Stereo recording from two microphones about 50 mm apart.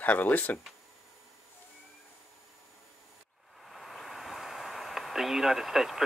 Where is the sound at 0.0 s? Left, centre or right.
Left.